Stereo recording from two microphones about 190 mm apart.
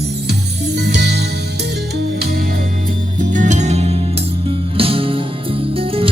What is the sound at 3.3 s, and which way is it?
Music, 40° right (ahead or behind).